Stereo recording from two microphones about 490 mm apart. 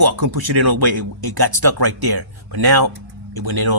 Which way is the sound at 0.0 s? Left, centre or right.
Right.